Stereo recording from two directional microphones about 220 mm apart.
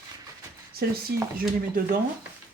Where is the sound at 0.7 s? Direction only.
45° right (ahead or behind).